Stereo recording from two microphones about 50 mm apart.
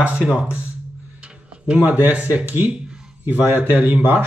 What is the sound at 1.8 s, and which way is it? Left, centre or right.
Speech, right.